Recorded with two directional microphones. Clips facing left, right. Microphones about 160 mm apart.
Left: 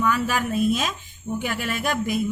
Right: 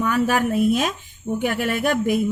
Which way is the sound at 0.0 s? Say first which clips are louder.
Right 3 dB; 60° right (ahead or behind).